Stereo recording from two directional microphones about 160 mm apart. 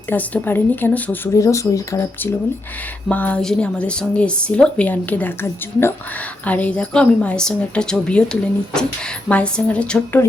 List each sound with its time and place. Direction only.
0.1 s a woman's voice: 10° left (ahead or behind)